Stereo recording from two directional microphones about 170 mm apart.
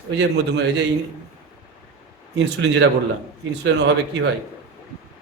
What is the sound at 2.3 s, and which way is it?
Speech, 90° right.